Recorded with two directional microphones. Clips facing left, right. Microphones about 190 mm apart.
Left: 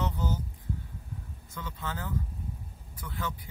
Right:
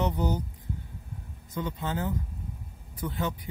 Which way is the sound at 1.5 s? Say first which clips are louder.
Right 7 dB; 20° right (ahead or behind).